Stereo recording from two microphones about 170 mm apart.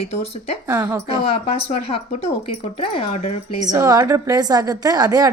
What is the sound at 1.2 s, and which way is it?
A woman's voice, 35° left (ahead or behind).